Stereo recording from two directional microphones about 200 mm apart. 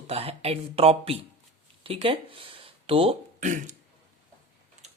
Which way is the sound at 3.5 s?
40° right (ahead or behind).